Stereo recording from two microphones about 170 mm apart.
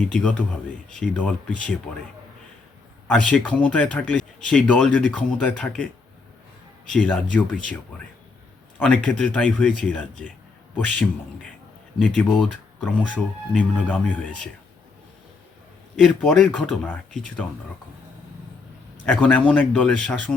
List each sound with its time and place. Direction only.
0.1 s speech: 5° left (ahead or behind)
3.1 s speech: 5° left (ahead or behind)
6.9 s speech: 10° left (ahead or behind)
12.0 s speech: 10° left (ahead or behind)
16.0 s speech: 5° left (ahead or behind)
19.0 s speech: 10° left (ahead or behind)